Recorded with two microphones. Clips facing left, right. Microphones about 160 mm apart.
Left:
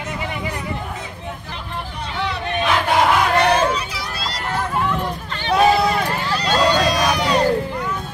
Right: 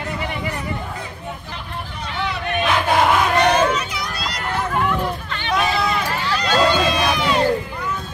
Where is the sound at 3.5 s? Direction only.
30° left (ahead or behind).